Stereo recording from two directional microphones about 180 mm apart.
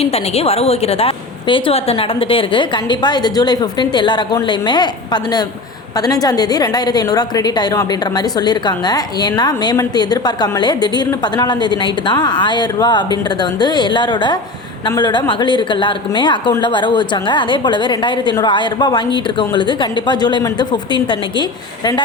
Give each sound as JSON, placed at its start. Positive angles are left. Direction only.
{"t": 0.0, "sound": "a woman's voice", "side_deg": 35}